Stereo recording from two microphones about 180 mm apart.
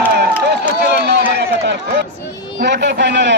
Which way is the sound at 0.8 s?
65° right (ahead or behind).